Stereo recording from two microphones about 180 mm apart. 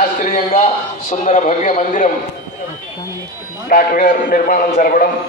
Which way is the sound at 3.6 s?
50° left (ahead or behind).